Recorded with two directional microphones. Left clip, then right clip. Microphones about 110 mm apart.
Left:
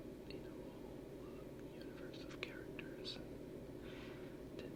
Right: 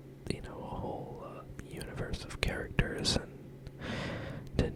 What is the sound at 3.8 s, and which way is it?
Gasp, 35° right (ahead or behind).